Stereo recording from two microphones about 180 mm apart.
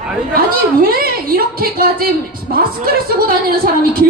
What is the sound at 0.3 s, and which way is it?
A woman's voice, 55° right (ahead or behind).